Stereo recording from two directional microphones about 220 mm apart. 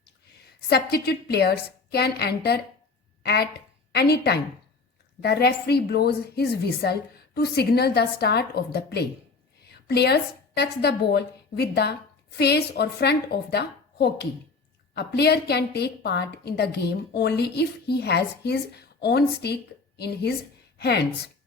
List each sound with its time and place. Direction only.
0.7 s a woman's voice: 45° left (ahead or behind)